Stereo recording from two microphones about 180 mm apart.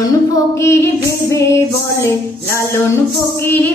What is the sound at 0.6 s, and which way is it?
Female singing, 15° left (ahead or behind).